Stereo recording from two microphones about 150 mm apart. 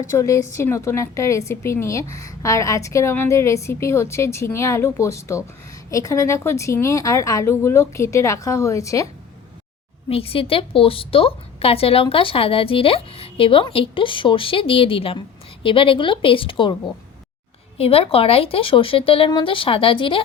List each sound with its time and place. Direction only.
0.2 s a woman's voice: 20° left (ahead or behind)
10.1 s a woman's voice: 40° left (ahead or behind)
17.7 s a woman's voice: 40° left (ahead or behind)